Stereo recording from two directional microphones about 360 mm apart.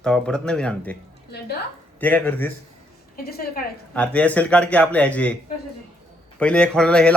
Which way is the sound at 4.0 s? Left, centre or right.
Centre.